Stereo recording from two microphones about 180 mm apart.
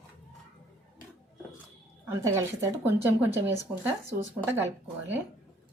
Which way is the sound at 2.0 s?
15° right (ahead or behind).